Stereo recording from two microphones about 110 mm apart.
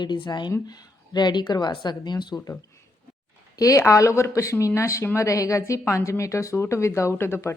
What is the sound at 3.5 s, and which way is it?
Speech, 30° left (ahead or behind).